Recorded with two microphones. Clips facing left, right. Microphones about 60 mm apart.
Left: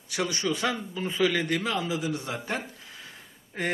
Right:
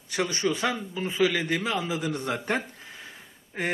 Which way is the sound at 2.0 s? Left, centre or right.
Right.